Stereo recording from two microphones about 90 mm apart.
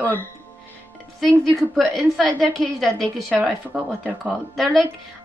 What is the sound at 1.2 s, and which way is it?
A woman's voice, centre (ahead or behind).